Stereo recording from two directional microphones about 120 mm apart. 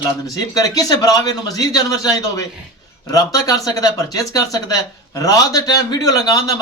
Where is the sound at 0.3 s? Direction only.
30° left (ahead or behind).